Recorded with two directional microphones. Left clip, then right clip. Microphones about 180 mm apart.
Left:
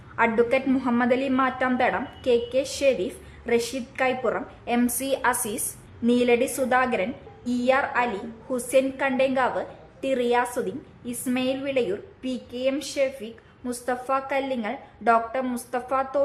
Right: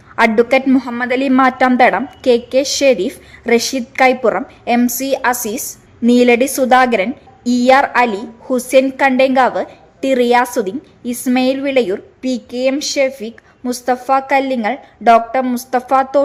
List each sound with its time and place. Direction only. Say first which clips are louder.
0.2 s a woman's voice: right 10 dB; 35° right (ahead or behind)
4.8 s a woman's voice: right 9 dB; 25° right (ahead or behind)